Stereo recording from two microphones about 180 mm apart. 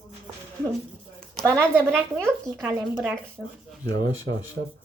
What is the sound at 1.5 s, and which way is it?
Speech, 15° right (ahead or behind).